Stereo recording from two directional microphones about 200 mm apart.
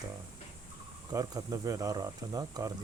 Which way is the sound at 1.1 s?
20° right (ahead or behind).